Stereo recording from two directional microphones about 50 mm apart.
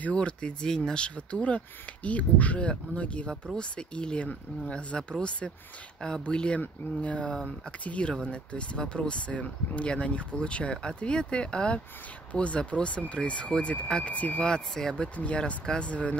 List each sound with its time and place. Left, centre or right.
0.0 s speech: left
14.4 s speech: centre
15.1 s speech: left